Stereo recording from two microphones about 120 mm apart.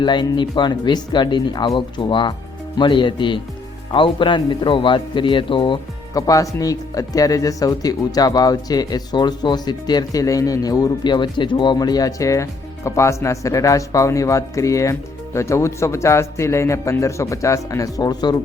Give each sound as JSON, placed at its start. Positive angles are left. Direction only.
{"t": 0.0, "sound": "a man's voice", "side_deg": 40}
{"t": 6.1, "sound": "speech", "side_deg": 30}